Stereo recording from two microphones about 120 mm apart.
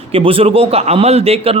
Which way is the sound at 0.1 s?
50° right (ahead or behind).